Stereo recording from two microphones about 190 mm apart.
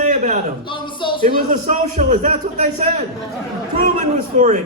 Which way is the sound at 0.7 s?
25° left (ahead or behind).